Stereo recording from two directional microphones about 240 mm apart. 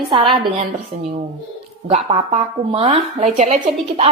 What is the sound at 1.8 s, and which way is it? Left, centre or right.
Speech, right.